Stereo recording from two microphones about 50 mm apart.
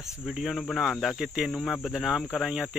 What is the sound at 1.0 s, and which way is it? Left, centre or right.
Speech, centre.